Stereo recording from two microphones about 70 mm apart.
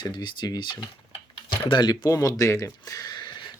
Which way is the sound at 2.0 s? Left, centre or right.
Left.